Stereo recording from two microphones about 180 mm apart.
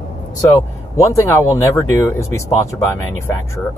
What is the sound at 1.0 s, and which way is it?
Speech, 15° left (ahead or behind).